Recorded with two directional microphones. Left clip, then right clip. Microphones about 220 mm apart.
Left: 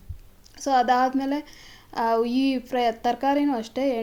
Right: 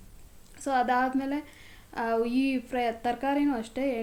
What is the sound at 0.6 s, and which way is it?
A woman's voice, 30° left (ahead or behind).